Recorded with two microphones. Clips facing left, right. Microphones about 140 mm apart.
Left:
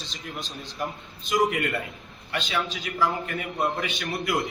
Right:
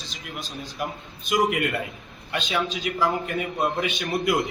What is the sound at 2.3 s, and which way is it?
A man's voice, 15° right (ahead or behind).